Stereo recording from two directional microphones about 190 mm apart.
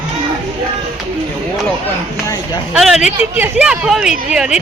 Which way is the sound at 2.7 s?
Centre (ahead or behind).